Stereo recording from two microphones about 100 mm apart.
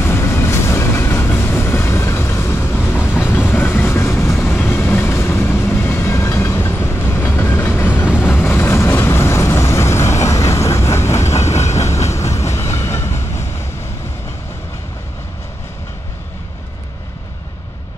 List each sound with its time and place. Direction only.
0.0 s train: 25° left (ahead or behind)